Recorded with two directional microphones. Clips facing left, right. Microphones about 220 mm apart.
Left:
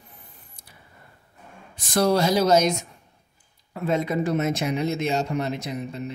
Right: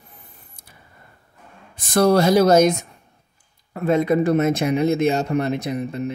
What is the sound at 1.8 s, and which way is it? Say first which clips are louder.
Speech: right 5 dB; 55° right (ahead or behind).